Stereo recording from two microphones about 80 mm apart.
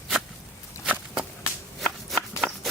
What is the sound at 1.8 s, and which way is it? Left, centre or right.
Shuffling cards, centre.